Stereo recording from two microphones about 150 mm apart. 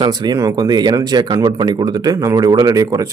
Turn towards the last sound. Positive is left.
turn(degrees=-25)  # may be behind; listen again after turning